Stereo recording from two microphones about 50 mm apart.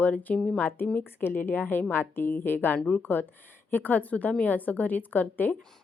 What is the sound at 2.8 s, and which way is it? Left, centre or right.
Speech, centre.